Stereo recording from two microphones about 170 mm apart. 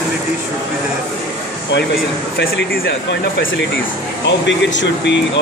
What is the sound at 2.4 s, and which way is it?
Speech, 85° left.